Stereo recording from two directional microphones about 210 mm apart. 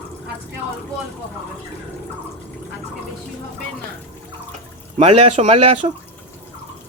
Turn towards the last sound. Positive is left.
turn(degrees=-30)  # may be behind; listen again after turning